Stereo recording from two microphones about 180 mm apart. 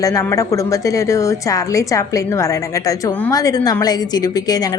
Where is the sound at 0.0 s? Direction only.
20° left (ahead or behind).